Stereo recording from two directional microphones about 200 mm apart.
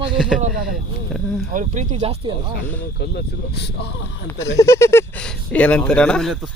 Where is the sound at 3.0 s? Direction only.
55° left (ahead or behind).